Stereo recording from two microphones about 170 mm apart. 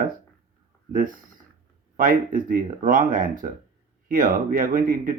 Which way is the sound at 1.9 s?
55° right (ahead or behind).